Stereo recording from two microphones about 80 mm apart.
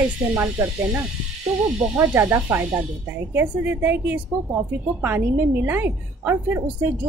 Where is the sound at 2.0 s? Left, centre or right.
Right.